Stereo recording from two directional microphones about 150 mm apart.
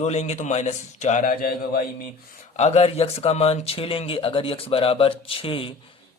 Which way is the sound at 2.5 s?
45° left (ahead or behind).